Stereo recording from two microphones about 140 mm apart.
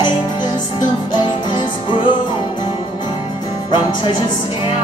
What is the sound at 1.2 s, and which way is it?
Music, 35° left (ahead or behind).